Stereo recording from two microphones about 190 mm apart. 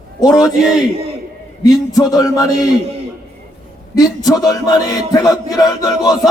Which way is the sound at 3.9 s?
20° left (ahead or behind).